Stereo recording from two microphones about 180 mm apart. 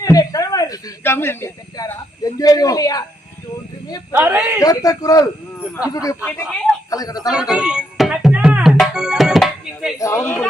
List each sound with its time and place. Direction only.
0.0 s speech: 20° left (ahead or behind)
4.1 s a man's voice: 10° right (ahead or behind)
4.6 s a man's voice: 20° left (ahead or behind)
6.2 s speech: 5° left (ahead or behind)
6.9 s a man's voice: 20° left (ahead or behind)
7.3 s music: 5° right (ahead or behind)
10.0 s a woman's voice: 15° left (ahead or behind)